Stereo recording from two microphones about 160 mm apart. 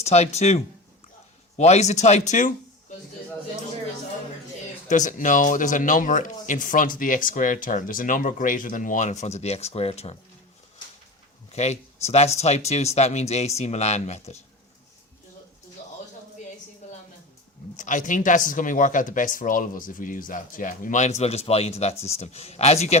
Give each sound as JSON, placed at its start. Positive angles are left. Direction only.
{"t": 0.0, "sound": "speech", "side_deg": 45}
{"t": 4.9, "sound": "speech", "side_deg": 50}
{"t": 11.5, "sound": "speech", "side_deg": 45}
{"t": 16.8, "sound": "music", "side_deg": 45}
{"t": 17.7, "sound": "speech", "side_deg": 50}